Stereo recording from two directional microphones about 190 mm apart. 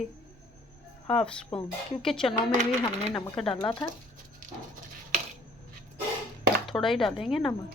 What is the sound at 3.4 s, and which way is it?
Speech, 30° left (ahead or behind).